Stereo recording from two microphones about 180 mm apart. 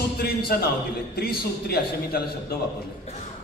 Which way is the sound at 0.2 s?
60° left (ahead or behind).